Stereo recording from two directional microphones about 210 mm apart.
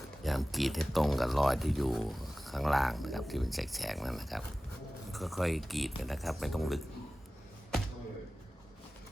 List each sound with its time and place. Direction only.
0.2 s speech: centre (ahead or behind)